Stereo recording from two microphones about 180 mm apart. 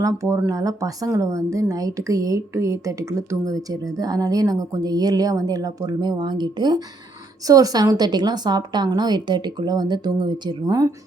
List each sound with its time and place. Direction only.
0.0 s speech: 15° right (ahead or behind)